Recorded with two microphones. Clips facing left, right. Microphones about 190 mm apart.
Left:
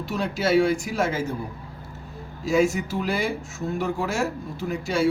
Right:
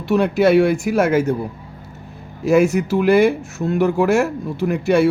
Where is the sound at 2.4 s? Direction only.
65° right (ahead or behind).